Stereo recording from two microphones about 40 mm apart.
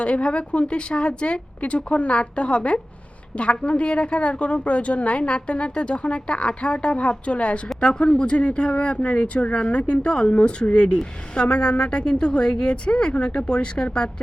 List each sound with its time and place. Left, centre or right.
0.0 s a woman's voice: left